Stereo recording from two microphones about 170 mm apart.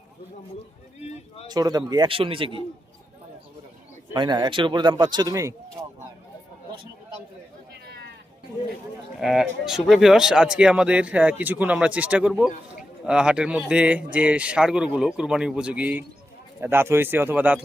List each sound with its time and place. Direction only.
1.5 s a man's voice: 20° right (ahead or behind)
4.1 s a man's voice: 25° right (ahead or behind)
7.7 s a sound: 85° right
9.2 s a man's voice: centre (ahead or behind)